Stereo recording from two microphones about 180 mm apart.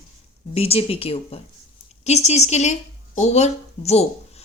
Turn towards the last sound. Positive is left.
turn(degrees=35)  # may be behind; listen again after turning